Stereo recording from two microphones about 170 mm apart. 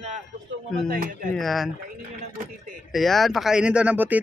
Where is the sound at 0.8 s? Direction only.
60° right (ahead or behind).